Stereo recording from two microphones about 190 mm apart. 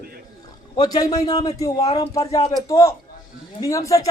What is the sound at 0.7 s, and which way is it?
A man's voice, 20° left (ahead or behind).